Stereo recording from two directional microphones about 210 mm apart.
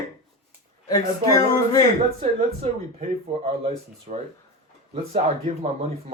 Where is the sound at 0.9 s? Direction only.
15° left (ahead or behind).